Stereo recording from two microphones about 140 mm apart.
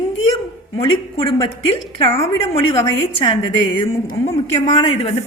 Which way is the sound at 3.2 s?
35° left (ahead or behind).